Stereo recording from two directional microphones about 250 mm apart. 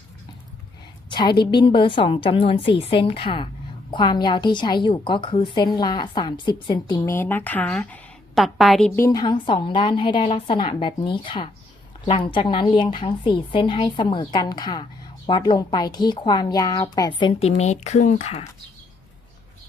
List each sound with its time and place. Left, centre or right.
1.1 s a woman's voice: centre
9.0 s speech: centre